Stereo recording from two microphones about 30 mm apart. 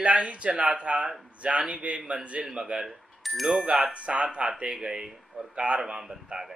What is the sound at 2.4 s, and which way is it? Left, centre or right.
Speech, right.